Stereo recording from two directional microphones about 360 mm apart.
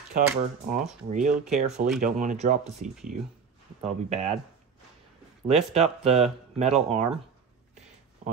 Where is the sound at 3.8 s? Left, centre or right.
Centre.